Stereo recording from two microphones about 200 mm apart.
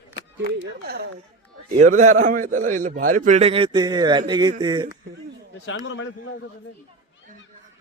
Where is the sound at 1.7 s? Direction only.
40° right (ahead or behind); by 5.0 s 20° right (ahead or behind).